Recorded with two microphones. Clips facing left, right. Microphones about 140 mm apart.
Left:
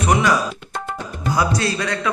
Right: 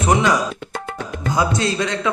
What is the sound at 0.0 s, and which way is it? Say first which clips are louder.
Speech: right 1 dB; 25° right (ahead or behind).